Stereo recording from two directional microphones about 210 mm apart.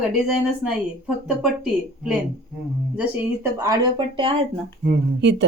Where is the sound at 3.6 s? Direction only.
20° right (ahead or behind).